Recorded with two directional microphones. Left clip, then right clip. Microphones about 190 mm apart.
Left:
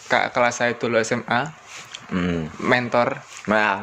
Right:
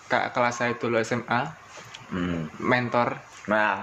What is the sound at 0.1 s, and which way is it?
Speech, 25° left (ahead or behind).